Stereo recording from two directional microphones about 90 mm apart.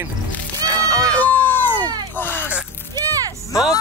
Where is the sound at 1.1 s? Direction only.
20° left (ahead or behind).